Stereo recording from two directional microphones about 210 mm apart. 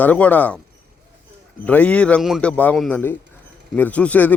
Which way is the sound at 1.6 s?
5° left (ahead or behind).